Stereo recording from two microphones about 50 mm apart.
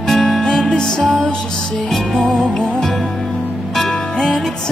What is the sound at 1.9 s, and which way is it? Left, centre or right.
Music, centre.